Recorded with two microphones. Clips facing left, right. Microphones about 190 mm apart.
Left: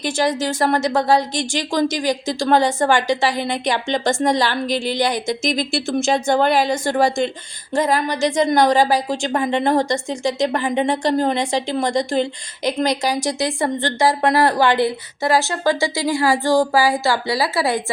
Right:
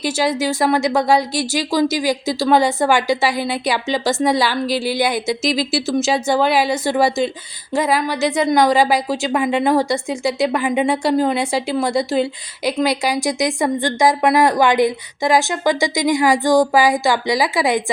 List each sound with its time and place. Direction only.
0.0 s speech: 10° right (ahead or behind)